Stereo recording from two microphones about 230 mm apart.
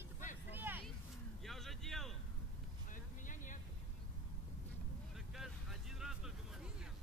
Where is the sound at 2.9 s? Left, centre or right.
Left.